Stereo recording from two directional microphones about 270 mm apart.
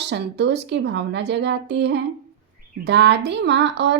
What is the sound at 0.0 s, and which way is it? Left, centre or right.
Speech, right.